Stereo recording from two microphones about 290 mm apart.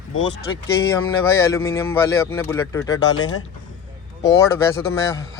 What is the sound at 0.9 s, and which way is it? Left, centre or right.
Speech, centre.